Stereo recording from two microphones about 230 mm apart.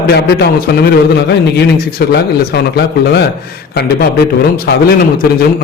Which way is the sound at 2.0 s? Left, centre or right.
Left.